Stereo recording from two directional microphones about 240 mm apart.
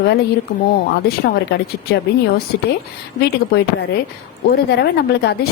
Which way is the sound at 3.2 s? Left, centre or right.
Left.